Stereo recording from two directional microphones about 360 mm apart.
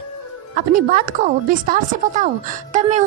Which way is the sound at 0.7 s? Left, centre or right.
Right.